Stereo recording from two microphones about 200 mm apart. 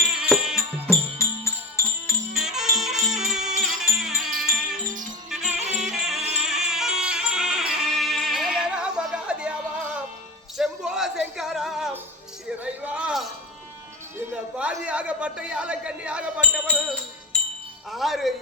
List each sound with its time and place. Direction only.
0.2 s music: 5° right (ahead or behind)
0.9 s music: 15° left (ahead or behind)
2.4 s music: centre (ahead or behind)
5.5 s music: 35° right (ahead or behind)
5.8 s music: centre (ahead or behind)
6.1 s music: 30° right (ahead or behind)
6.4 s music: centre (ahead or behind)
10.6 s a sound: centre (ahead or behind)
16.4 s music: 5° left (ahead or behind)
17.9 s wind chime: centre (ahead or behind)